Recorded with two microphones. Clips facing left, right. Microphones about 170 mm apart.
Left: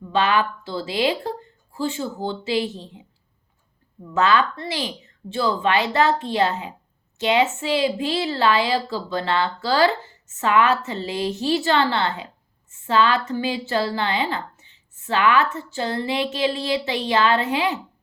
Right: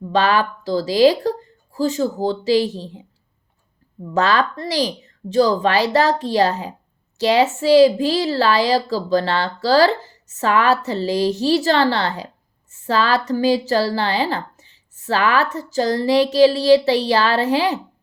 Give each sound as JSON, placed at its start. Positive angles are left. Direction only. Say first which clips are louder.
{"t": 0.1, "sound": "a woman's voice", "louder": "right 3 dB", "side_deg": -40}
{"t": 4.1, "sound": "a woman's voice", "louder": "right 1 dB", "side_deg": -35}